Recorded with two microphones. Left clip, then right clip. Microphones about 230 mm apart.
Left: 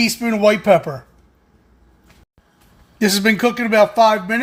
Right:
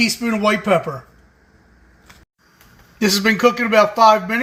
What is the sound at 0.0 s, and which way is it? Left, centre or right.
Speech, left.